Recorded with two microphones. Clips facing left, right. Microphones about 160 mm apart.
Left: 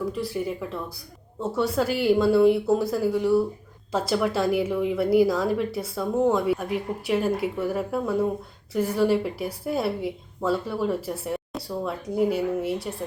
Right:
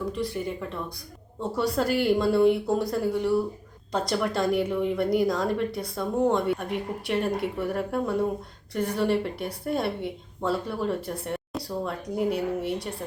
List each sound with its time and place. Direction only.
0.2 s speech: 5° left (ahead or behind)